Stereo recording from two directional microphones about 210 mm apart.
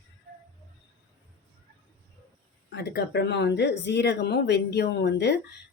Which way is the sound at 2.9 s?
55° left (ahead or behind).